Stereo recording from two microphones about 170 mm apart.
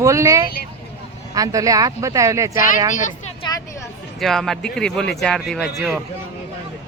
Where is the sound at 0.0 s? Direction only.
20° right (ahead or behind).